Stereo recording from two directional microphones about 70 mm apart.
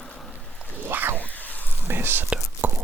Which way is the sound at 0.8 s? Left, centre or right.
Right.